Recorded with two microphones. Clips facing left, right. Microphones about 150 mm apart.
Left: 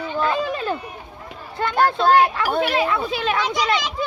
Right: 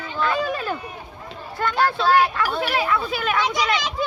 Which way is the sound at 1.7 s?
50° left (ahead or behind).